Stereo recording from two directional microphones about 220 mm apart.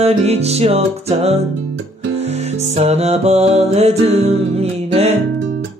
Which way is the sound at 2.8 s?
30° right (ahead or behind).